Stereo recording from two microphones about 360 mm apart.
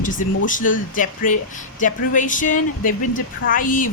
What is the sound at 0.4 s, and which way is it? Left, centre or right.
Speech, left.